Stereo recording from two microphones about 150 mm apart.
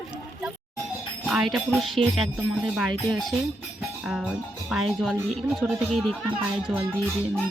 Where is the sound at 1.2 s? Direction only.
5° right (ahead or behind).